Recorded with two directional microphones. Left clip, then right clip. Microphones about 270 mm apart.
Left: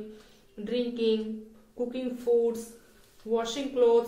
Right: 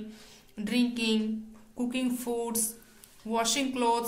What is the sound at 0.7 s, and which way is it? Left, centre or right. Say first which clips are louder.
Speech: left 2 dB; right.